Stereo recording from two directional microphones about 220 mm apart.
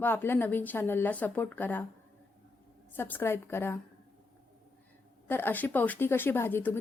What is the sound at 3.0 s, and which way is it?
Speech, 10° left (ahead or behind).